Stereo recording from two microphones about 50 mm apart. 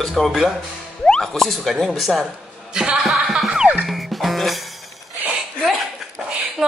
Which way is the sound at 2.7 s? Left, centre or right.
Centre.